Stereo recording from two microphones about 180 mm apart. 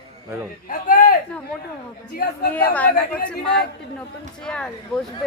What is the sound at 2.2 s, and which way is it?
Speech, 55° left (ahead or behind).